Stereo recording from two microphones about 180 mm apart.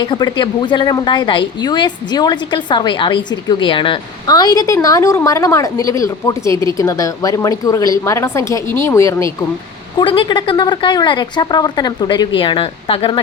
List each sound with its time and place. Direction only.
0.0 s a woman's voice: 25° left (ahead or behind)
10.0 s a woman's voice: 25° left (ahead or behind)